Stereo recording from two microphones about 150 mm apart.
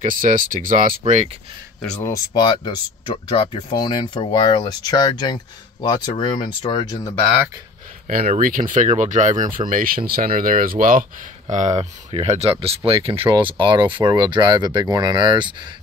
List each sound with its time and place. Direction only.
0.0 s speech: 60° right (ahead or behind)
1.8 s speech: 5° left (ahead or behind)
2.0 s speech: 25° left (ahead or behind)
8.4 s speech: 65° right (ahead or behind)
9.7 s speech: 70° right (ahead or behind); by 15.5 s 30° right (ahead or behind)